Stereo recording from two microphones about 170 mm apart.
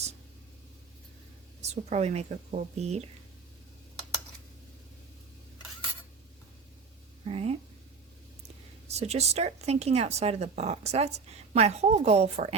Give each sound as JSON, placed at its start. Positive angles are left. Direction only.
{"t": 1.6, "sound": "speech", "side_deg": -40}
{"t": 7.3, "sound": "a sound", "side_deg": -35}
{"t": 8.9, "sound": "speech", "side_deg": -40}